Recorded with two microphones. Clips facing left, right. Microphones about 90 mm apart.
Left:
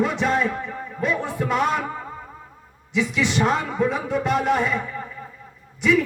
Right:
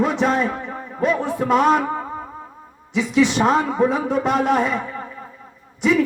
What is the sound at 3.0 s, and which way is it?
A man's voice, 30° right (ahead or behind).